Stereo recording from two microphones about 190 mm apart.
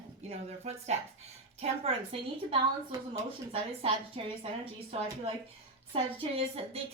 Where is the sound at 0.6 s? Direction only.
35° right (ahead or behind).